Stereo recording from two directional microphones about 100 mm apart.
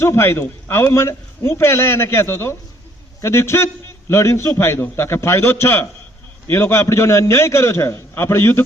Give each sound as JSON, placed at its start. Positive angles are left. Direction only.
{"t": 0.0, "sound": "a man's voice", "side_deg": 25}